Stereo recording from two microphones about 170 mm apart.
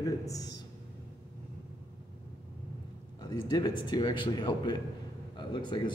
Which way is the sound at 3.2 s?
25° left (ahead or behind).